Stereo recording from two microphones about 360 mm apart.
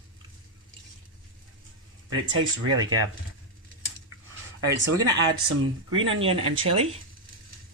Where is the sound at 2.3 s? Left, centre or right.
Right.